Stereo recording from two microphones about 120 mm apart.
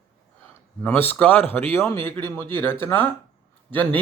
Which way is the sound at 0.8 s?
15° left (ahead or behind).